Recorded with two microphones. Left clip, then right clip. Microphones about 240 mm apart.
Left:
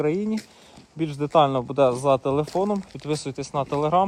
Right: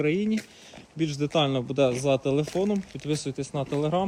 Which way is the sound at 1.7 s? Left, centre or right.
Left.